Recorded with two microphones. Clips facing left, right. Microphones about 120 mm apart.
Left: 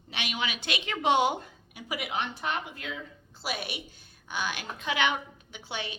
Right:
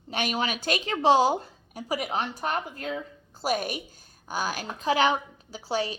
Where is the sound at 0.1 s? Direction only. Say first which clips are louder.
Right 6 dB; 40° right (ahead or behind).